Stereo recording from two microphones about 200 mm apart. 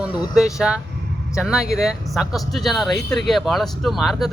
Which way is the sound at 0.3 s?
5° right (ahead or behind).